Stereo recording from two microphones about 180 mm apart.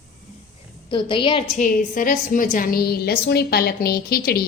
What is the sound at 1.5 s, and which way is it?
A woman's voice, 45° left (ahead or behind).